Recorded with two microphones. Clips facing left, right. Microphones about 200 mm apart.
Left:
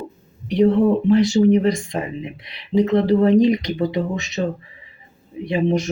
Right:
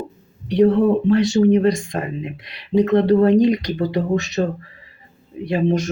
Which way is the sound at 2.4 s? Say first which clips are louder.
Right 1 dB; 20° left (ahead or behind).